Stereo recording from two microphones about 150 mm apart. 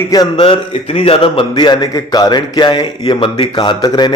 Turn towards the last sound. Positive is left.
turn(degrees=25)  # may be behind; listen again after turning